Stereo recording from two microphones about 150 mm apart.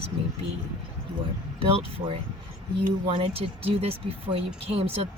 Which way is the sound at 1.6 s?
40° right (ahead or behind).